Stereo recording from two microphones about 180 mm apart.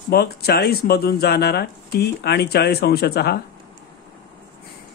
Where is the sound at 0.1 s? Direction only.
60° left (ahead or behind).